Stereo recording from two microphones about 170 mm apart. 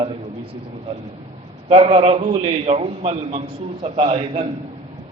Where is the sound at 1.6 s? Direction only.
35° right (ahead or behind).